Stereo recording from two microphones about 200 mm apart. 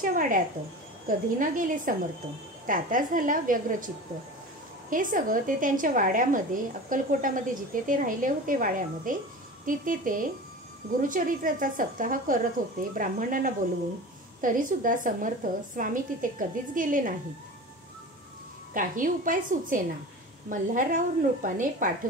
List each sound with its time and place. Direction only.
0.0 s a woman's voice: 40° right (ahead or behind)
18.7 s a woman's voice: 40° right (ahead or behind)